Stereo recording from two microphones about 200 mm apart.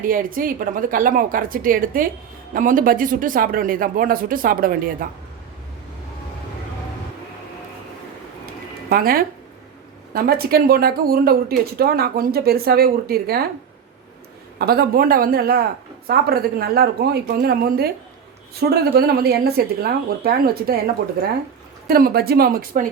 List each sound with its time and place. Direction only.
0.0 s speech: 45° right (ahead or behind)
8.9 s speech: 45° right (ahead or behind)
14.6 s speech: 50° right (ahead or behind)